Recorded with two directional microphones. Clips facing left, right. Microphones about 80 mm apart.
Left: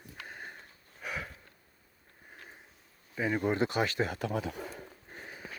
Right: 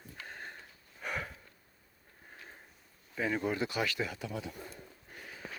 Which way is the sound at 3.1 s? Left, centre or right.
Centre.